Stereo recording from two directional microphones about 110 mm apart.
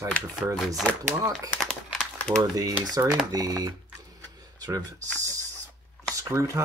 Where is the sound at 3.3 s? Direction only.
35° right (ahead or behind).